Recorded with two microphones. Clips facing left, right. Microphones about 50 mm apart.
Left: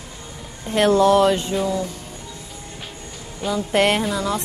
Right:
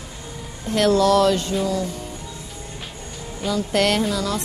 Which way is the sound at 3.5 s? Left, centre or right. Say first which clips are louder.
Left 2 dB; left.